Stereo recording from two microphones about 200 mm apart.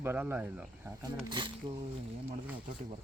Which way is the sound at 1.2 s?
20° right (ahead or behind).